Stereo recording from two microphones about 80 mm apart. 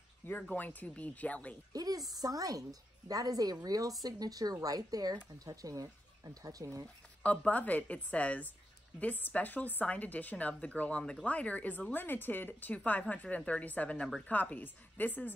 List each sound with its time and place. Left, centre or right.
0.3 s speech: centre
1.7 s speech: right
7.2 s a woman's voice: centre